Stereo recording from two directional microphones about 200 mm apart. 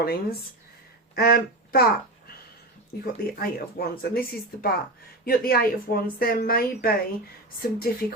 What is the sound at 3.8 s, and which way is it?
Speech, 50° left (ahead or behind).